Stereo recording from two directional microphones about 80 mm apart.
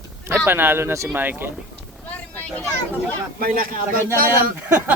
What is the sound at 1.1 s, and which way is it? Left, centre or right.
Speech, right.